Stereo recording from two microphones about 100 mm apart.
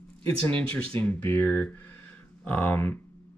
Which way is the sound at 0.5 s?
15° left (ahead or behind).